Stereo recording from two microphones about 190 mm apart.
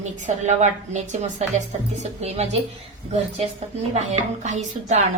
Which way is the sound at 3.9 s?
40° right (ahead or behind).